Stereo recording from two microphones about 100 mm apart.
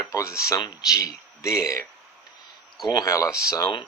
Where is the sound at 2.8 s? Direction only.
40° left (ahead or behind).